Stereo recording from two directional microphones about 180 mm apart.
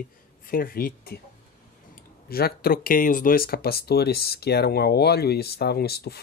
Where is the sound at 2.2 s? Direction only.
55° left (ahead or behind).